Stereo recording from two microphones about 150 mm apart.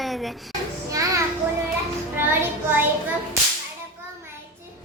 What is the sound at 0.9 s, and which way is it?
Children playing, 20° right (ahead or behind).